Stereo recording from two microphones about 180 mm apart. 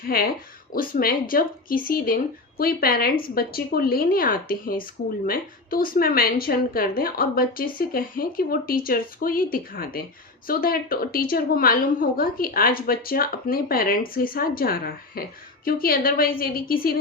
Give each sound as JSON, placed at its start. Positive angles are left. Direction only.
{"t": 0.0, "sound": "a woman's voice", "side_deg": 55}